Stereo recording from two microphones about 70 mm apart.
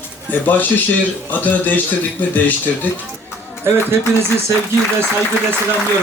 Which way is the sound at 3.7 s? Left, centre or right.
Right.